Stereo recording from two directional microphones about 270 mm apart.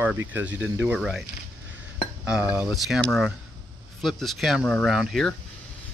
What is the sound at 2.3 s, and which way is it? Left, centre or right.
Speech, centre.